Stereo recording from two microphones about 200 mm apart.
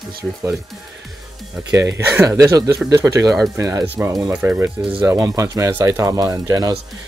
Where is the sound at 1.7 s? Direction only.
15° right (ahead or behind).